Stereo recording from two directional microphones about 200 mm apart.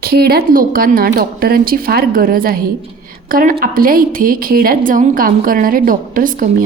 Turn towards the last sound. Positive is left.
turn(degrees=-40)  # may be behind; listen again after turning